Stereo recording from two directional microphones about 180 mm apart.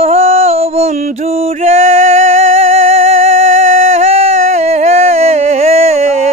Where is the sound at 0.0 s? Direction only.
40° right (ahead or behind).